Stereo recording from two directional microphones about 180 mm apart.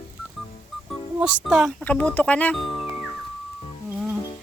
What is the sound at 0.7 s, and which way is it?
Music, centre (ahead or behind).